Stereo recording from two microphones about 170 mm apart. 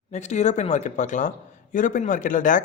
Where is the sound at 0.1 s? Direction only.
45° left (ahead or behind).